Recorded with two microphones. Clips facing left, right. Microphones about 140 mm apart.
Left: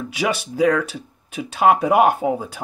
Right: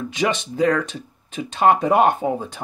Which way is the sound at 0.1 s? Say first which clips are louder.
Even; 10° left (ahead or behind).